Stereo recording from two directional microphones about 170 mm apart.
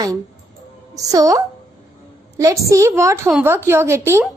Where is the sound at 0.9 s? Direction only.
20° right (ahead or behind).